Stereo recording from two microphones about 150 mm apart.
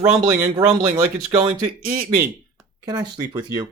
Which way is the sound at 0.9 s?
20° right (ahead or behind).